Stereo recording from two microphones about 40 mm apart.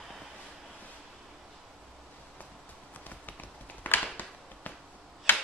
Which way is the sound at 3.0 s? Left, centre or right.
Left.